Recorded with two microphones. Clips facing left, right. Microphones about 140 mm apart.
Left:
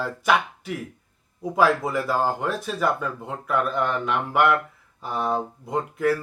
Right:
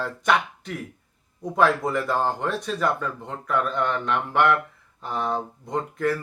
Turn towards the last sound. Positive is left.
turn(degrees=5)  # may be behind; listen again after turning